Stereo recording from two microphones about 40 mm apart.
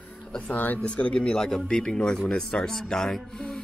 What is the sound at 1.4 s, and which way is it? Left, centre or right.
Speech, centre.